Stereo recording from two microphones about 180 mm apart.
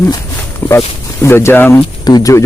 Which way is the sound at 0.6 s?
10° left (ahead or behind).